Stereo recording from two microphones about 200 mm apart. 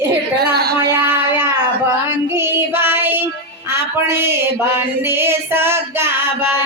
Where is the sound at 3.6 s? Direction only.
10° right (ahead or behind).